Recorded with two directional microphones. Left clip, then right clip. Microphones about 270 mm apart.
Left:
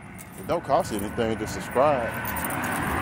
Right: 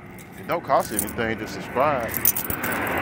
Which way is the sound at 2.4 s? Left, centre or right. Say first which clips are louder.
Right 3 dB; left.